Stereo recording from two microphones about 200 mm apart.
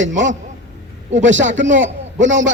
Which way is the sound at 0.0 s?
65° right (ahead or behind).